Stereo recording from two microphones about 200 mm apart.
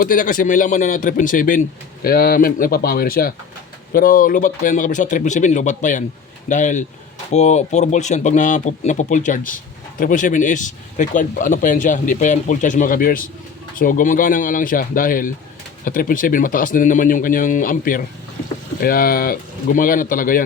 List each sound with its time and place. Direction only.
0.0 s speech: 45° left (ahead or behind)